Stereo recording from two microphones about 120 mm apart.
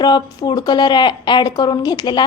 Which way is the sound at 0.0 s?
35° left (ahead or behind).